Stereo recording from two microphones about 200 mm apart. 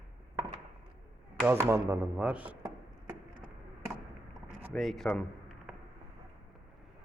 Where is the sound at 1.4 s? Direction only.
15° right (ahead or behind).